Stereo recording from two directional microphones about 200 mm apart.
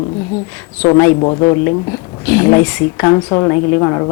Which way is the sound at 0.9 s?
15° left (ahead or behind).